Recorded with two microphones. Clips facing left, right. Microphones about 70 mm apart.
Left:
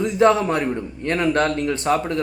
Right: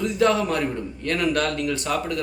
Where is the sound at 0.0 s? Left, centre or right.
Left.